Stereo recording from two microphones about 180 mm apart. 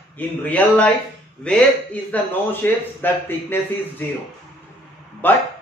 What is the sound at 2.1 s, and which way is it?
A man's voice, 10° left (ahead or behind).